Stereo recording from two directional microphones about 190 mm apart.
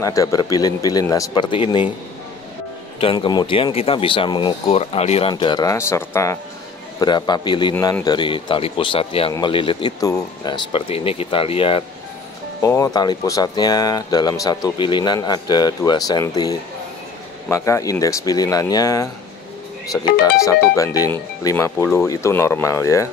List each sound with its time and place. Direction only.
0.0 s speech: 15° left (ahead or behind)
3.0 s speech: 30° left (ahead or behind)
5.3 s speech: 20° left (ahead or behind)
12.6 s speech: 15° left (ahead or behind)